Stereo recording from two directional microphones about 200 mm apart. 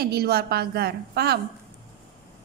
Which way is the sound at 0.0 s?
50° right (ahead or behind).